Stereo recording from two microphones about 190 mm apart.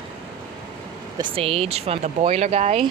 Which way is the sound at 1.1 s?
30° right (ahead or behind).